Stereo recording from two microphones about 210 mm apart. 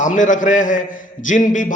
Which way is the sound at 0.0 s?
35° left (ahead or behind).